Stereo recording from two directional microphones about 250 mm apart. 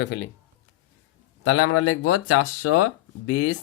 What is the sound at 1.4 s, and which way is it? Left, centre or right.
Speech, left.